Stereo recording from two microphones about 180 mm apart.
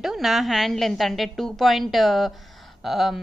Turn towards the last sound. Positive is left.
turn(degrees=0)  # may be behind; listen again after turning